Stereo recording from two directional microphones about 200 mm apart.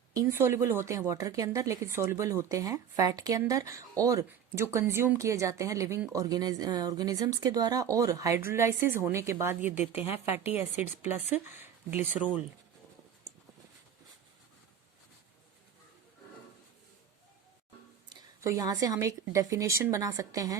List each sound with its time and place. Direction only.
0.1 s speech: 15° right (ahead or behind)
11.6 s speech: 10° right (ahead or behind)
18.1 s a woman's voice: 15° right (ahead or behind)